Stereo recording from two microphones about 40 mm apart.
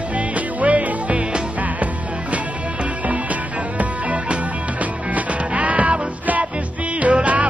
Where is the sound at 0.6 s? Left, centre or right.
Right.